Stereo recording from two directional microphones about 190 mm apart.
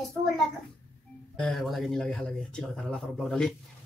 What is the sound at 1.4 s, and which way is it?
Speech, centre (ahead or behind).